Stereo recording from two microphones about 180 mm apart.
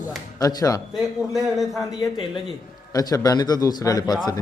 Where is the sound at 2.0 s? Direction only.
25° left (ahead or behind).